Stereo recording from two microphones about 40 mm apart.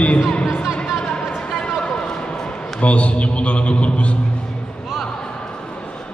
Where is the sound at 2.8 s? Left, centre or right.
Left.